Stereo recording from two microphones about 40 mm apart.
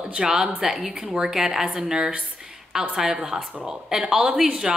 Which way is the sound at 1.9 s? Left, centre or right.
Right.